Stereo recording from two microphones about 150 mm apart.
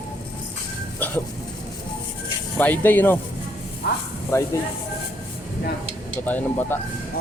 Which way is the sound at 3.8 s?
90° left.